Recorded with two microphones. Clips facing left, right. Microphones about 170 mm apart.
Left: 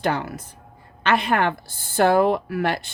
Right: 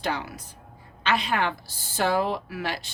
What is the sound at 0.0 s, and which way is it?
A woman's voice, 55° left (ahead or behind).